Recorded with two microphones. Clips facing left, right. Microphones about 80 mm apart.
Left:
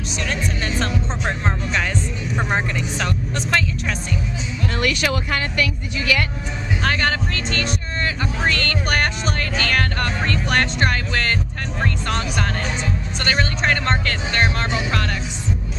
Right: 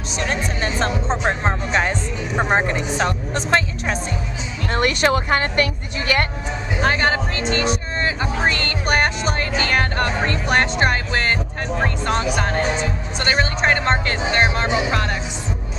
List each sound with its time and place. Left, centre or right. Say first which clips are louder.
0.2 s speech: right 3 dB; right
6.8 s speech: right 3 dB; centre